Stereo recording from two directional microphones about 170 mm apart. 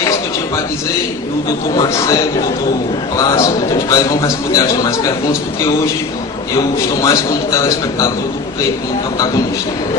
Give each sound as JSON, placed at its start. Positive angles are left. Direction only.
{"t": 1.7, "sound": "a man's voice", "side_deg": 20}
{"t": 3.2, "sound": "a man's voice", "side_deg": 20}
{"t": 6.6, "sound": "a man's voice", "side_deg": 20}